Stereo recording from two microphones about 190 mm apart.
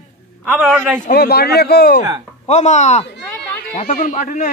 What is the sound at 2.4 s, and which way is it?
Speech, 40° left (ahead or behind).